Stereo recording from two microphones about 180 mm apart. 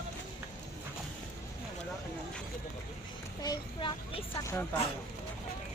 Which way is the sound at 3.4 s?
25° left (ahead or behind).